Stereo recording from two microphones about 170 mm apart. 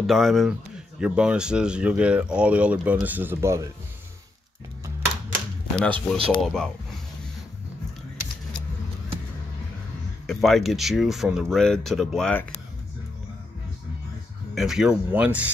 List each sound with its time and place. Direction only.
0.0 s speech: centre (ahead or behind); by 3.6 s 15° right (ahead or behind)
5.9 s speech: 35° right (ahead or behind)
6.4 s speech: 5° left (ahead or behind)
10.2 s speech: centre (ahead or behind)
14.5 s speech: centre (ahead or behind)